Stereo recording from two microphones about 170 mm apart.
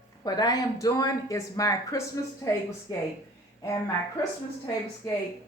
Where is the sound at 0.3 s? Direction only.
20° left (ahead or behind).